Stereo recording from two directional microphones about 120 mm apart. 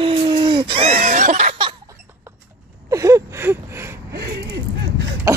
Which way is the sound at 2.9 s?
25° right (ahead or behind).